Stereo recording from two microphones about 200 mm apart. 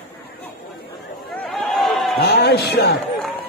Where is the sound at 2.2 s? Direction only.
55° left (ahead or behind).